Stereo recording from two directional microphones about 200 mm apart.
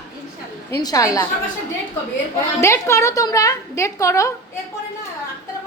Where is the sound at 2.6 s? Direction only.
15° left (ahead or behind).